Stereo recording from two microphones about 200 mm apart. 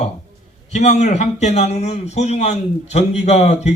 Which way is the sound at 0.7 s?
35° left (ahead or behind).